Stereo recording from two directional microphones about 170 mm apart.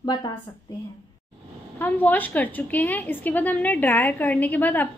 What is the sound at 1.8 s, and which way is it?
A woman's voice, 10° left (ahead or behind).